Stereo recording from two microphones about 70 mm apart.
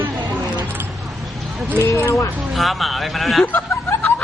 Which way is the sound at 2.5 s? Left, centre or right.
Centre.